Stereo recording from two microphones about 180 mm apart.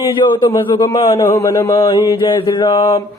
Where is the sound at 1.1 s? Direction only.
15° left (ahead or behind).